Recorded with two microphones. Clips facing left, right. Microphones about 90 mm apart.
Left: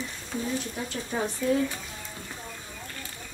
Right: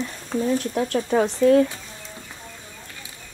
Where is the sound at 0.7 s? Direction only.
75° right (ahead or behind).